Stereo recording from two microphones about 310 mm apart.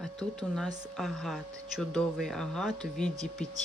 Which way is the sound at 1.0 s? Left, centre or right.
Centre.